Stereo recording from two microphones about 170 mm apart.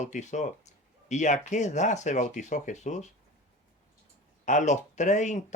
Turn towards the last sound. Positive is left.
turn(degrees=45)  # may be behind; listen again after turning